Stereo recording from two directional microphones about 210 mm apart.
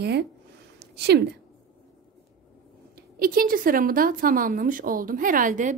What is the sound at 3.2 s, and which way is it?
A woman's voice, 45° right (ahead or behind).